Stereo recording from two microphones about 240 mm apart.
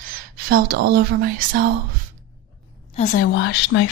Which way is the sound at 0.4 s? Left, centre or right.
Right.